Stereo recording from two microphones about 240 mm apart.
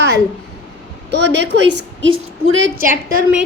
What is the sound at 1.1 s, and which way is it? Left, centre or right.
A woman's voice, right.